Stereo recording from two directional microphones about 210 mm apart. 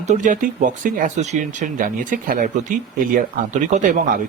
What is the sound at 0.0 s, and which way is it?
Speech, 35° right (ahead or behind).